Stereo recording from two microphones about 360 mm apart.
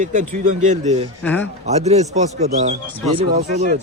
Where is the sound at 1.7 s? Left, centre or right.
Centre.